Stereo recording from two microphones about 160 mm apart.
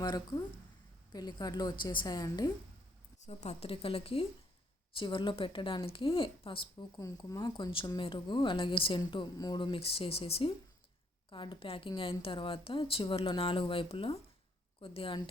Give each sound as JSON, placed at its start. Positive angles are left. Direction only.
{"t": 0.0, "sound": "a woman's voice", "side_deg": 25}
{"t": 3.2, "sound": "a woman's voice", "side_deg": 40}